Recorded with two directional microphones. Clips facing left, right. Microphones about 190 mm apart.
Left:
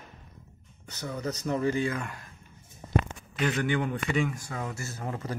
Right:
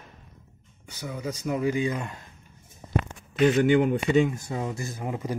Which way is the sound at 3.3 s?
20° right (ahead or behind).